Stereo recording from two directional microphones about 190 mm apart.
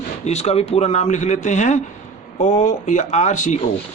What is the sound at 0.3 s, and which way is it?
Speech, 35° left (ahead or behind).